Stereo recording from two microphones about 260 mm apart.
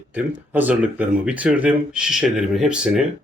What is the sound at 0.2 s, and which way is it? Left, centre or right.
Speech, centre.